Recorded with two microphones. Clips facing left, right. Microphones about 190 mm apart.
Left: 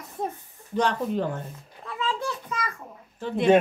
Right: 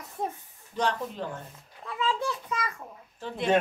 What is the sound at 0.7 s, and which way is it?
Speech, 60° left (ahead or behind).